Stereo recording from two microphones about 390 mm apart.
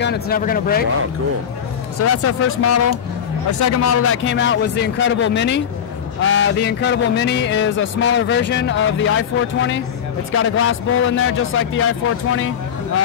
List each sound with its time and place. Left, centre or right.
0.0 s music: left
2.0 s a man's voice: left
3.5 s music: left
10.3 s a man's voice: left